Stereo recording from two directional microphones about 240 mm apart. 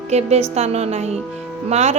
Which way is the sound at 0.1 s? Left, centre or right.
Right.